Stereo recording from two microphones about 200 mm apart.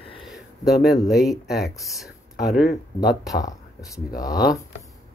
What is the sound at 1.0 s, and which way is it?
Speech, centre (ahead or behind).